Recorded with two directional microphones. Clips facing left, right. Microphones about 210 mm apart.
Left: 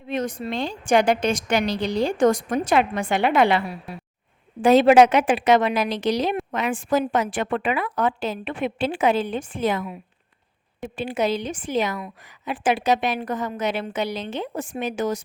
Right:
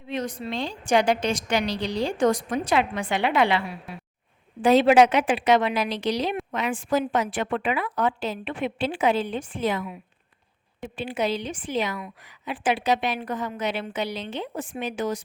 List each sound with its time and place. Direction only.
0.1 s a woman's voice: 50° left (ahead or behind)